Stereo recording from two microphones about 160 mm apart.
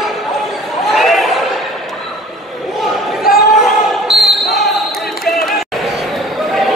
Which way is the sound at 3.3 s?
65° left (ahead or behind).